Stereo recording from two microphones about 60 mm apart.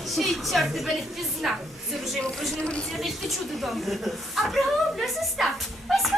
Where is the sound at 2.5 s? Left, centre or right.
Centre.